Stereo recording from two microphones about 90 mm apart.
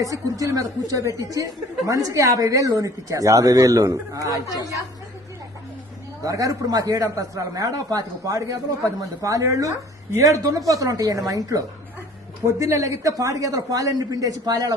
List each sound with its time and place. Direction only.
0.0 s speech: 40° right (ahead or behind)
4.4 s speech: 45° left (ahead or behind)
6.2 s speech: 40° right (ahead or behind)
12.4 s speech: 35° right (ahead or behind)